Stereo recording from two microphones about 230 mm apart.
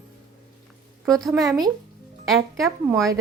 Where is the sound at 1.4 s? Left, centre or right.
Centre.